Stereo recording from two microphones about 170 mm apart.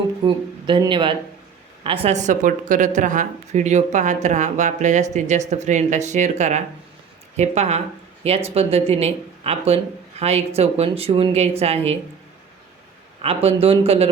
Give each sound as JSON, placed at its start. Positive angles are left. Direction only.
{"t": 0.2, "sound": "a woman's voice", "side_deg": -30}
{"t": 13.2, "sound": "a woman's voice", "side_deg": -35}